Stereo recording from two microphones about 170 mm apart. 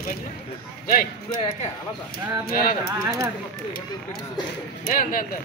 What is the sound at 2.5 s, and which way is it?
Speech, 55° left (ahead or behind).